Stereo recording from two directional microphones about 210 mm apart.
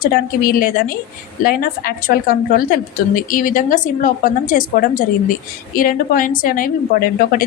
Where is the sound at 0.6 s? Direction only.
40° left (ahead or behind).